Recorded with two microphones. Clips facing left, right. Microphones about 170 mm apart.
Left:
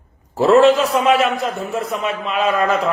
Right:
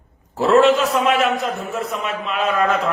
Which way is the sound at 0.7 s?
Centre (ahead or behind).